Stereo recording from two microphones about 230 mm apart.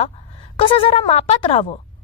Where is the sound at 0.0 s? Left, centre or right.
Left.